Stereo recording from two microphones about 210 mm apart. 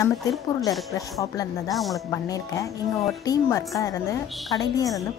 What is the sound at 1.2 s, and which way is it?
Speech, 15° left (ahead or behind).